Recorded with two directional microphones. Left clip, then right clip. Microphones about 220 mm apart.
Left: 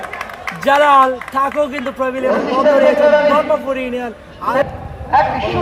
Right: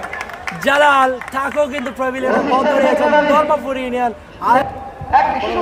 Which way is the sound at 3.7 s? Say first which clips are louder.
Right 2 dB; 40° right (ahead or behind).